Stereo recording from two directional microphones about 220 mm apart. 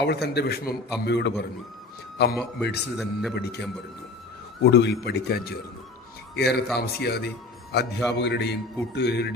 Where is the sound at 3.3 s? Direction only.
45° left (ahead or behind).